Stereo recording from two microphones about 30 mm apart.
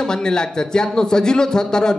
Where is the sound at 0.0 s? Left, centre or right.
Left.